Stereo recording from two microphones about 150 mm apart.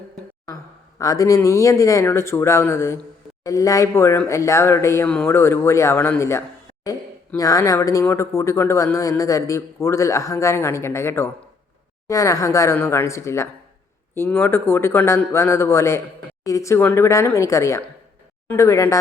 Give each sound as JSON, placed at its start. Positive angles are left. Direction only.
{"t": 0.9, "sound": "speech", "side_deg": 20}
{"t": 5.0, "sound": "speech", "side_deg": 5}
{"t": 5.3, "sound": "speech", "side_deg": 15}